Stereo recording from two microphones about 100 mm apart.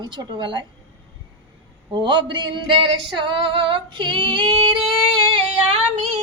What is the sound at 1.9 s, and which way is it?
Female singing, 55° right (ahead or behind).